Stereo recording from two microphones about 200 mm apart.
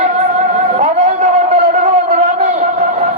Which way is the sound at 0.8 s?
35° right (ahead or behind).